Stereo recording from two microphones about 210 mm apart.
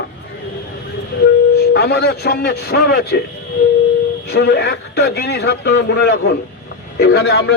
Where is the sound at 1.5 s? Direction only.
50° left (ahead or behind).